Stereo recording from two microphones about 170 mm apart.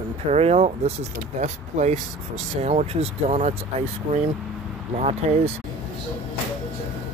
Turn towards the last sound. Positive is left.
turn(degrees=-35)  # may be behind; listen again after turning